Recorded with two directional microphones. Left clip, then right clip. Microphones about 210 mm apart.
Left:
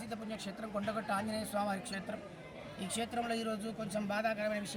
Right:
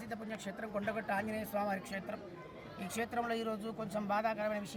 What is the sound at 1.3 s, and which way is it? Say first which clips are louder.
Speech: left 1 dB; 10° right (ahead or behind).